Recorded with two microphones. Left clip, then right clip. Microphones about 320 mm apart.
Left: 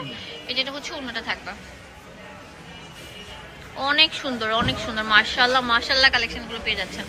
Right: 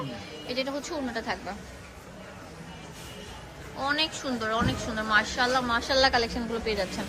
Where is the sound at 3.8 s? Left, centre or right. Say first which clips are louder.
Left 8 dB; centre.